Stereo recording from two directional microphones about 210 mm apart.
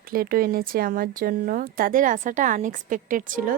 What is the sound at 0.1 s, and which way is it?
Speech, 45° right (ahead or behind).